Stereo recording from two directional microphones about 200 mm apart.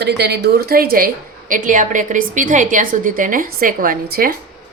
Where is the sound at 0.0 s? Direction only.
55° right (ahead or behind).